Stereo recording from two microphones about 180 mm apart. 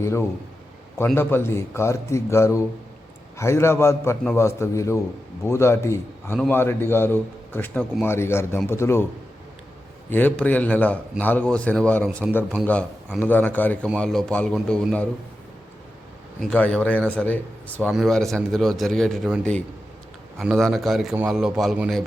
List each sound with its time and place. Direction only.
0.0 s a man's voice: 15° left (ahead or behind)
10.1 s a man's voice: 10° left (ahead or behind)
16.4 s speech: 5° left (ahead or behind)